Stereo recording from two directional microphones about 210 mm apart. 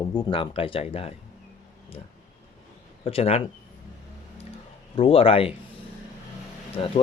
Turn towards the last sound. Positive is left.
turn(degrees=30)  # may be behind; listen again after turning